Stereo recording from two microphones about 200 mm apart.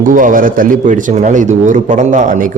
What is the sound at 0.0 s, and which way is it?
A man's voice, 40° right (ahead or behind).